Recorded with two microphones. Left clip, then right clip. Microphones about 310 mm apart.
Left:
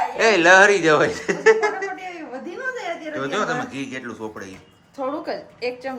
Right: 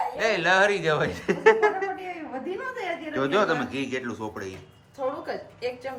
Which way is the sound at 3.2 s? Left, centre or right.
Centre.